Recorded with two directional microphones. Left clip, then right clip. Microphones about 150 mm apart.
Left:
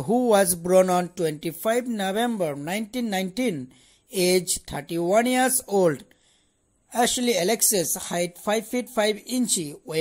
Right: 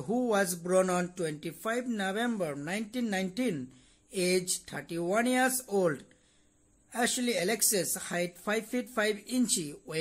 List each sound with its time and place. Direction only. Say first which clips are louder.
0.0 s a woman's voice: left 9 dB; 35° left (ahead or behind)